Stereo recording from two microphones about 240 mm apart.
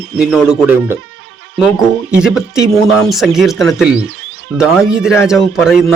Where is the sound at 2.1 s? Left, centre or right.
Centre.